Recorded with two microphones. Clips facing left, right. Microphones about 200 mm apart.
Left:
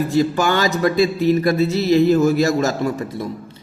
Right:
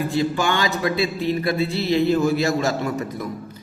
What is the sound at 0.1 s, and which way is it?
A man's voice, 45° left (ahead or behind).